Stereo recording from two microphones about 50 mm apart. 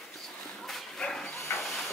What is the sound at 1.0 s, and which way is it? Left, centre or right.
Dog, centre.